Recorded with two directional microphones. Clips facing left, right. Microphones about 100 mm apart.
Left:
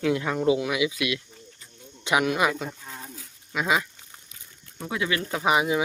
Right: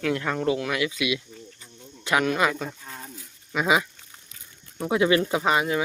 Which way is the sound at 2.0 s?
15° left (ahead or behind).